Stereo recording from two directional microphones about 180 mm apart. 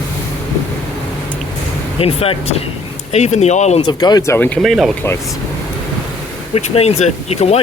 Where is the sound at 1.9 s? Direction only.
35° left (ahead or behind).